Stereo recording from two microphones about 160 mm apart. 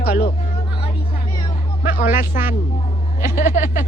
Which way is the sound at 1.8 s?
60° left (ahead or behind).